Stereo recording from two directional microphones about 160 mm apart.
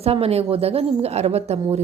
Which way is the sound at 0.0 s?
40° right (ahead or behind).